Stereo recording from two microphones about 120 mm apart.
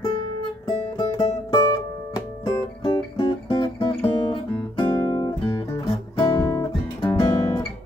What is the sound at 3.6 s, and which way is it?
Guitar, 45° left (ahead or behind).